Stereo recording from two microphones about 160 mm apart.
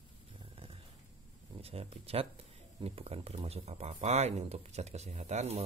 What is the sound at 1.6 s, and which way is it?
Speech, 35° right (ahead or behind).